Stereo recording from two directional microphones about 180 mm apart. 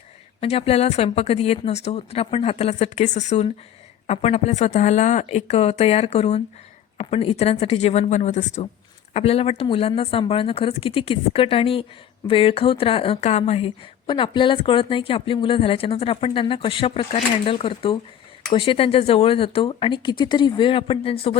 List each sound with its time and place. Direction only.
0.3 s speech: 35° left (ahead or behind)